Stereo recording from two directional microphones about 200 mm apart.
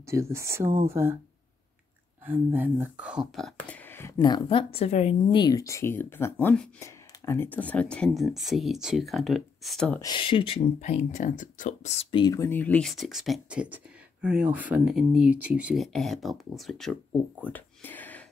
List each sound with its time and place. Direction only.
0.0 s speech: 15° right (ahead or behind)
2.2 s speech: 10° right (ahead or behind)
9.9 s speech: 20° left (ahead or behind); by 16.9 s centre (ahead or behind)
17.4 s a sound: 10° left (ahead or behind)